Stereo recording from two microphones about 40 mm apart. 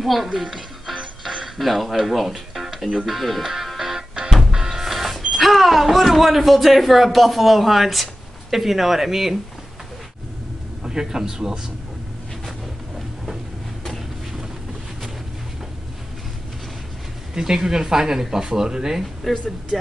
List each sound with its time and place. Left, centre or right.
0.0 s speech: centre
1.2 s music: centre
1.6 s speech: centre
3.4 s music: centre
5.3 s speech: centre
10.8 s a man's voice: centre
17.3 s speech: centre
19.7 s speech: centre